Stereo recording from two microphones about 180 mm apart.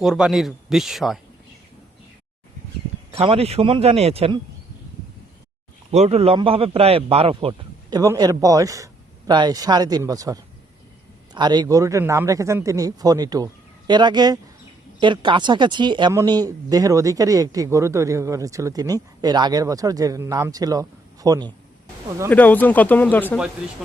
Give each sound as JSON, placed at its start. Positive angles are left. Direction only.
{"t": 0.0, "sound": "speech", "side_deg": -5}
{"t": 3.1, "sound": "a man's voice", "side_deg": -30}
{"t": 5.9, "sound": "speech", "side_deg": -35}
{"t": 22.3, "sound": "speech", "side_deg": 10}